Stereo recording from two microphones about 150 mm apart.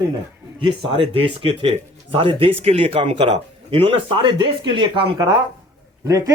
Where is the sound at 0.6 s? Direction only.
35° right (ahead or behind).